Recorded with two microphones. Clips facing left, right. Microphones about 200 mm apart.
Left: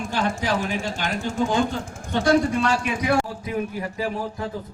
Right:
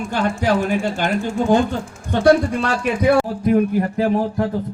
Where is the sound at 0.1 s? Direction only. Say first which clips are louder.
Right 6 dB; 55° right (ahead or behind).